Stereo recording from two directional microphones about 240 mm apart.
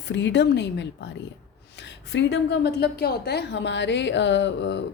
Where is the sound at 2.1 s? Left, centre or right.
Left.